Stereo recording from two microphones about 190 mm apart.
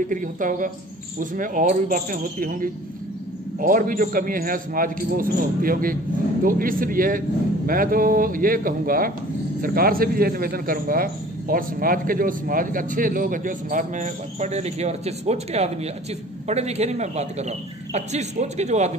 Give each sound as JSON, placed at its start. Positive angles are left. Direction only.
{"t": 0.1, "sound": "a man's voice", "side_deg": -45}